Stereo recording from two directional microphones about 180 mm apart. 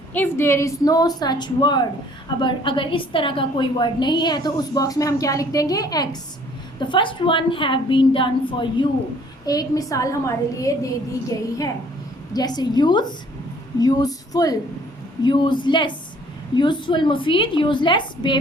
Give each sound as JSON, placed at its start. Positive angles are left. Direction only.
{"t": 0.1, "sound": "a woman's voice", "side_deg": 10}
{"t": 12.3, "sound": "a woman's voice", "side_deg": 20}